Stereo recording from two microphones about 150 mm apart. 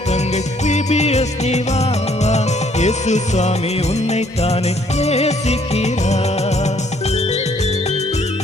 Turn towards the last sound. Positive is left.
turn(degrees=45)  # may be behind; listen again after turning